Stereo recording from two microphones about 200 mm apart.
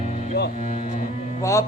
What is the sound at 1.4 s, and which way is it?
Speech, 15° left (ahead or behind).